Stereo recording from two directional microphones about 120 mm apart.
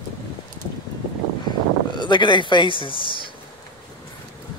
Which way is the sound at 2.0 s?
40° left (ahead or behind).